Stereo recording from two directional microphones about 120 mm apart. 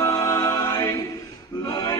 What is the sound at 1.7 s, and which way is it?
Music, 30° left (ahead or behind).